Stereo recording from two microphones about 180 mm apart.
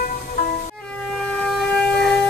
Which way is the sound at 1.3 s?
5° left (ahead or behind).